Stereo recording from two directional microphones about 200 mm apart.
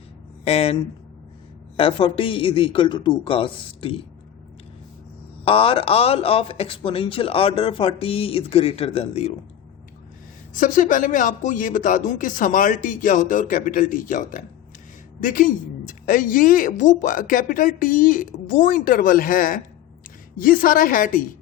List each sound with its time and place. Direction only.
0.4 s speech: 30° left (ahead or behind)
5.5 s speech: 25° left (ahead or behind)
10.5 s a woman's voice: 40° left (ahead or behind)